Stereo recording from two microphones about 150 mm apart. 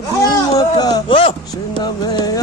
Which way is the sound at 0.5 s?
25° left (ahead or behind).